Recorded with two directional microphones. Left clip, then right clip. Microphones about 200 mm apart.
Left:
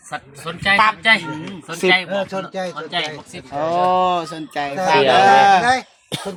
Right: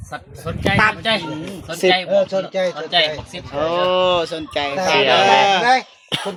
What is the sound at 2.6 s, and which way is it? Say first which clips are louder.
Speech: right 7 dB; 5° left (ahead or behind).